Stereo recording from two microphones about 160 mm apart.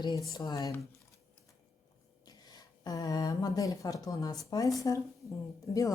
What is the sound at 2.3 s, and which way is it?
Speech, 25° left (ahead or behind).